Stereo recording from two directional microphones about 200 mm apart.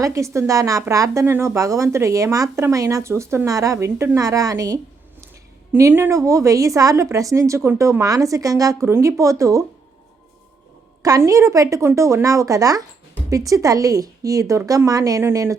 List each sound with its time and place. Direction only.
0.0 s speech: 15° right (ahead or behind)
11.0 s speech: 15° right (ahead or behind)